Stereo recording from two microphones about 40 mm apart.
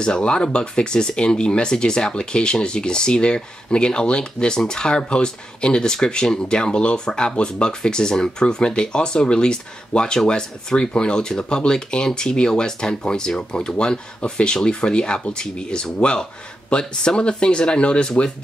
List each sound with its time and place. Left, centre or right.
0.0 s speech: left